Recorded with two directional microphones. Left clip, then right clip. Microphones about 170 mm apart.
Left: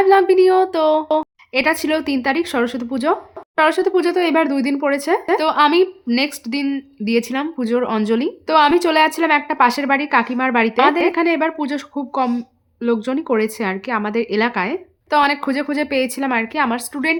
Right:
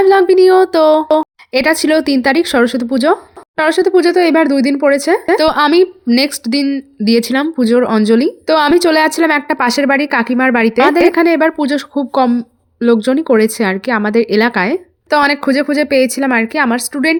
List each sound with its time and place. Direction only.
0.0 s speech: 35° right (ahead or behind)